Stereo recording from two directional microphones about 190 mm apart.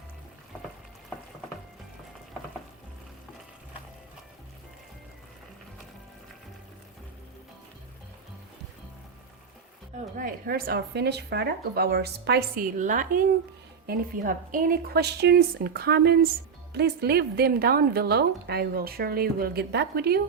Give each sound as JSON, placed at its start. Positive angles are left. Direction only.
{"t": 10.2, "sound": "a woman's voice", "side_deg": -50}